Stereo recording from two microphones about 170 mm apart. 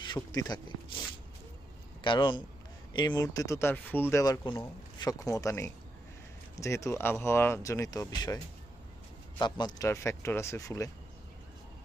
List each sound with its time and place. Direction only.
0.0 s speech: 25° left (ahead or behind)
2.0 s speech: 30° left (ahead or behind)
9.4 s speech: 25° left (ahead or behind)